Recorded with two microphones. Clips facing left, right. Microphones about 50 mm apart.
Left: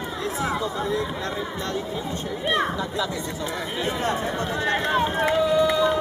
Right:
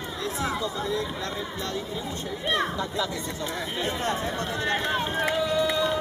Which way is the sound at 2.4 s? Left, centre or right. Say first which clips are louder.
Left 3 dB; centre.